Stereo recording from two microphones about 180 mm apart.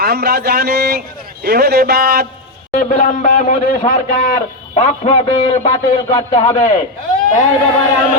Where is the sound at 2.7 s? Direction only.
45° left (ahead or behind).